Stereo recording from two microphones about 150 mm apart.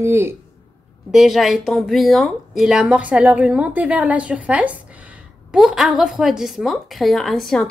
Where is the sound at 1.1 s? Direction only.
Centre (ahead or behind).